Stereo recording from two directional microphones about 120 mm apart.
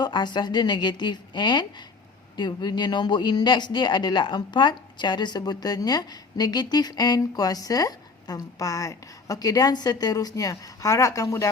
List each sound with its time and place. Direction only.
0.0 s speech: 40° left (ahead or behind)